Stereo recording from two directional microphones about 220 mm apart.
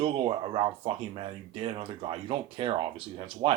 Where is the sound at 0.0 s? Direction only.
20° right (ahead or behind).